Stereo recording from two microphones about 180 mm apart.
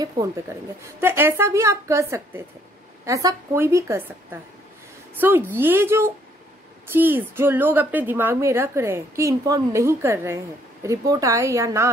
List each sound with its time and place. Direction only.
0.2 s a woman's voice: 20° right (ahead or behind)